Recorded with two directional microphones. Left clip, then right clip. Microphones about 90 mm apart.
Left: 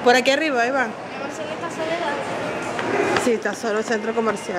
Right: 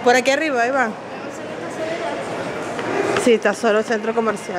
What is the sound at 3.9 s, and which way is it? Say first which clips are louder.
Speech: right 2 dB; 5° right (ahead or behind).